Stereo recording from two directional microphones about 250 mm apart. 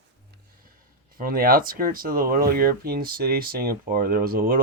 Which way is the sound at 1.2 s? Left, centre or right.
Right.